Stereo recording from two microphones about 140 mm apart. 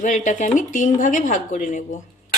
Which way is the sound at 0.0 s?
60° left (ahead or behind).